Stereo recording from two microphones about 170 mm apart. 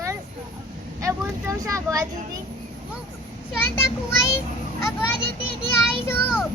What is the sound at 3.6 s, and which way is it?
Speech, 15° left (ahead or behind).